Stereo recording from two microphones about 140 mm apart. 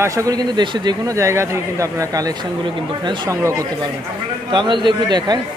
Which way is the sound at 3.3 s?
20° right (ahead or behind).